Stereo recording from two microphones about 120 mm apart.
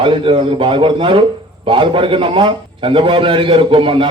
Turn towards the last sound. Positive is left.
turn(degrees=-45)  # may be behind; listen again after turning